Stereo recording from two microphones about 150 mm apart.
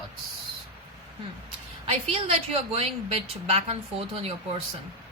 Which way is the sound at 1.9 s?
40° right (ahead or behind).